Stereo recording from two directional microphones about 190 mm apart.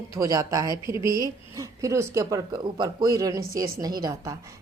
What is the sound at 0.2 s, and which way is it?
Speech, 15° right (ahead or behind).